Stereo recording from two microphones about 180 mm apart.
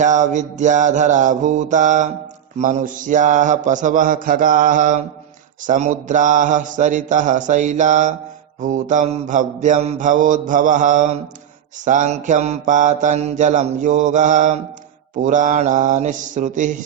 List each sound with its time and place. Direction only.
0.0 s mantra: 40° right (ahead or behind)